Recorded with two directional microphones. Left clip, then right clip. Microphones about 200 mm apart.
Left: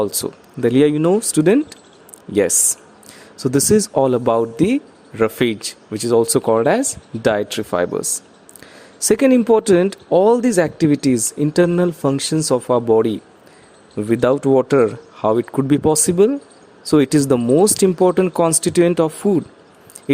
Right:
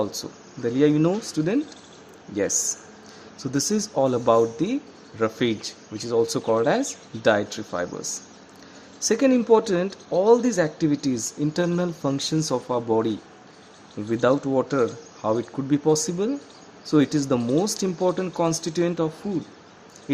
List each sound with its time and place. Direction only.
0.0 s speech: 45° left (ahead or behind)
3.4 s speech: 45° left (ahead or behind)
9.0 s speech: 45° left (ahead or behind)
14.1 s speech: 45° left (ahead or behind)